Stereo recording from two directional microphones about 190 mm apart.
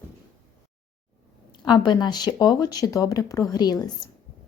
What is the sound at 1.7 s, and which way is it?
Speech, 20° left (ahead or behind).